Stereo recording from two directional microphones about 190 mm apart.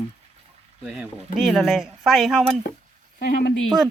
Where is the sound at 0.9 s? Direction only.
Centre (ahead or behind).